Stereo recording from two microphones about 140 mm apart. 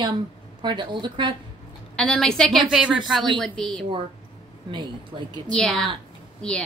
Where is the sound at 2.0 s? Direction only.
5° left (ahead or behind).